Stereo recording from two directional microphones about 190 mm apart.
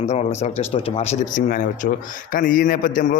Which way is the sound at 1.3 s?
45° left (ahead or behind).